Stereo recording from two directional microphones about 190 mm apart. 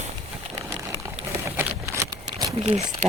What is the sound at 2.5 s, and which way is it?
Speech, 35° right (ahead or behind).